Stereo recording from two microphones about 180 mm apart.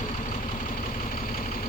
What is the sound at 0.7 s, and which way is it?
Vehicle, 50° left (ahead or behind).